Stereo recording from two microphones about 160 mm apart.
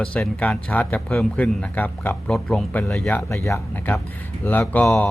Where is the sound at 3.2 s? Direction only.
15° left (ahead or behind).